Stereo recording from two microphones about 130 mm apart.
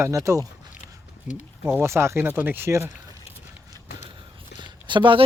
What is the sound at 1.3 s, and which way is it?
Speech, 15° right (ahead or behind).